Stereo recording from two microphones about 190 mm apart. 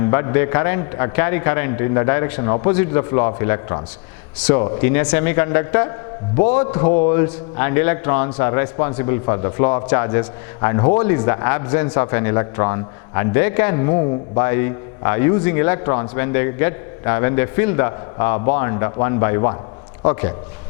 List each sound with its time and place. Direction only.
0.0 s a man's voice: 15° left (ahead or behind)